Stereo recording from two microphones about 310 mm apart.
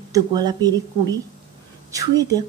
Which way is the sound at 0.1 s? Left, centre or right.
Centre.